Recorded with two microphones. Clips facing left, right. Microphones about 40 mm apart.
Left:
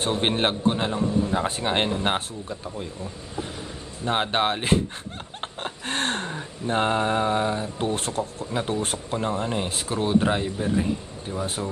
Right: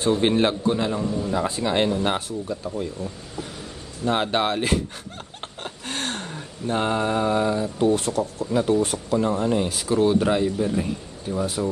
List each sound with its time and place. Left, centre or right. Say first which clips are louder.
0.0 s a man's voice: right 4 dB; left
5.4 s a sound: left 3 dB; left
8.5 s a man's voice: right 8 dB; left
11.4 s a man's voice: right 5 dB; left